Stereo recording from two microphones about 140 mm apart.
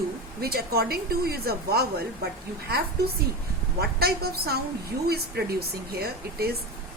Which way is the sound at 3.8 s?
90° right.